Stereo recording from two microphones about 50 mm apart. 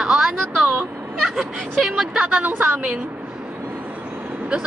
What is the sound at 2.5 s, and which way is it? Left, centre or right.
Speech, right.